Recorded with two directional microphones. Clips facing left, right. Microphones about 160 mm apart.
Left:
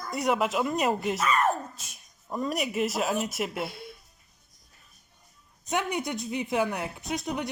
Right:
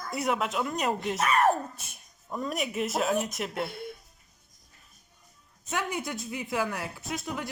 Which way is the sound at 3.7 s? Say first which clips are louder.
Right 3 dB; 55° right (ahead or behind).